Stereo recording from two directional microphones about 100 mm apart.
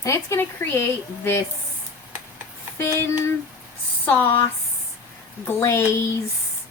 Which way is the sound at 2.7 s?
25° left (ahead or behind).